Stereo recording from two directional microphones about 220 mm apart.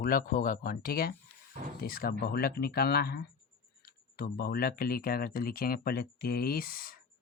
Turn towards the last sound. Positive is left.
turn(degrees=40)  # may be behind; listen again after turning